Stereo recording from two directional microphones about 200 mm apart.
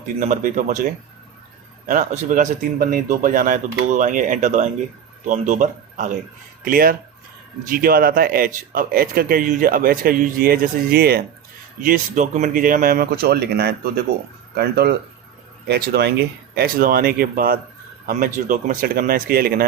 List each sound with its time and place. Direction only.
0.2 s speech: 40° right (ahead or behind)
1.9 s a man's voice: 40° right (ahead or behind)
11.8 s speech: 40° right (ahead or behind)